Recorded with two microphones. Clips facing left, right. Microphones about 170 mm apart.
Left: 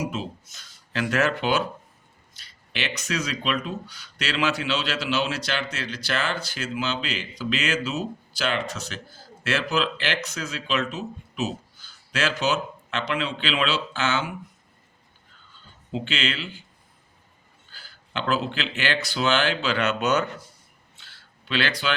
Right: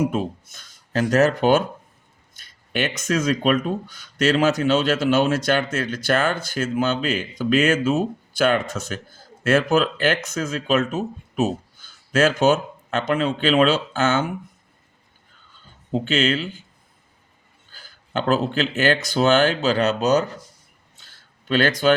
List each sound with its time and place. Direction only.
0.0 s speech: 55° right (ahead or behind)
1.0 s speech: 40° right (ahead or behind)
15.9 s speech: 45° right (ahead or behind)
17.7 s speech: 45° right (ahead or behind)
20.9 s a sound: 45° right (ahead or behind)